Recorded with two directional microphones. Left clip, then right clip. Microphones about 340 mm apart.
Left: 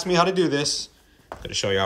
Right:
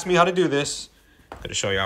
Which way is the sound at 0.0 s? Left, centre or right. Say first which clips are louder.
Right 1 dB; centre.